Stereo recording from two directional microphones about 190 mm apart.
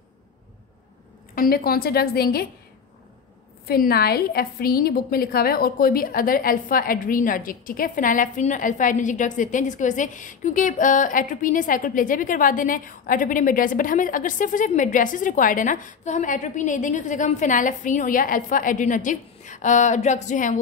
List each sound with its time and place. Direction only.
1.3 s a woman's voice: 50° left (ahead or behind)
3.6 s a woman's voice: 50° left (ahead or behind)